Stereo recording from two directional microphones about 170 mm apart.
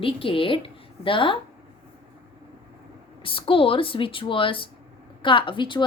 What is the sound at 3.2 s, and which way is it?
A child's voice, 30° left (ahead or behind).